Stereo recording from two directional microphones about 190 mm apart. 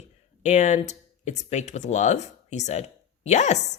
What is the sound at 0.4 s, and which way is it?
Speech, 40° left (ahead or behind).